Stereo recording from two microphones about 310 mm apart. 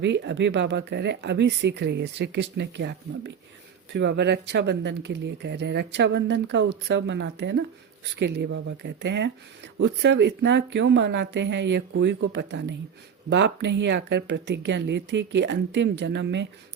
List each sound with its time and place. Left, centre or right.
0.0 s speech: right